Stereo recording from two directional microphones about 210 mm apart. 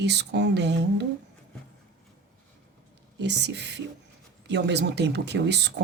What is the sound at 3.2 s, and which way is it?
Speech, 55° right (ahead or behind).